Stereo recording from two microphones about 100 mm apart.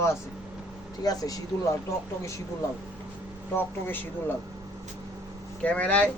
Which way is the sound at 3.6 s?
20° left (ahead or behind).